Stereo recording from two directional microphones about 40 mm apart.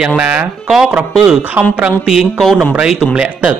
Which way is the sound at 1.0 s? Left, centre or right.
Centre.